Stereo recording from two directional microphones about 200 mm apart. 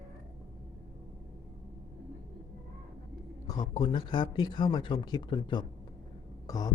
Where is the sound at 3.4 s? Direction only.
20° left (ahead or behind).